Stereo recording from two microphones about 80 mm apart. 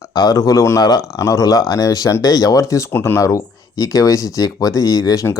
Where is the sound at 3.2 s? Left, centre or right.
Left.